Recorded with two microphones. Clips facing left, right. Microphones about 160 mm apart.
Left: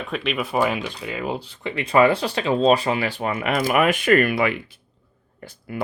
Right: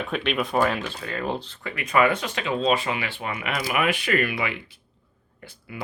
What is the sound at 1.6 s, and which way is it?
Speech, 30° left (ahead or behind).